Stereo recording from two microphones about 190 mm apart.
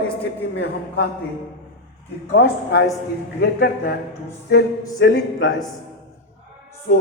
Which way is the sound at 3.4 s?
60° left (ahead or behind).